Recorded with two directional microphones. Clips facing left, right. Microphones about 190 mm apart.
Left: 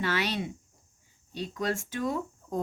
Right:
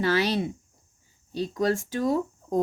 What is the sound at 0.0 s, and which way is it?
Speech, 35° right (ahead or behind).